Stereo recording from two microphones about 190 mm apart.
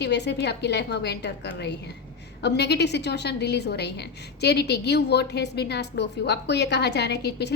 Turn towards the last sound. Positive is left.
turn(degrees=60)  # may be behind; listen again after turning